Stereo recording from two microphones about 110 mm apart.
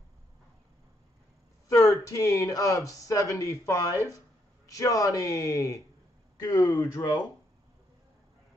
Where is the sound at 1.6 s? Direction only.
30° left (ahead or behind).